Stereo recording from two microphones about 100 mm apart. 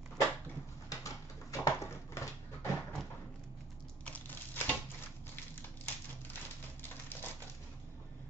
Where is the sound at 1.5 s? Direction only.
30° left (ahead or behind).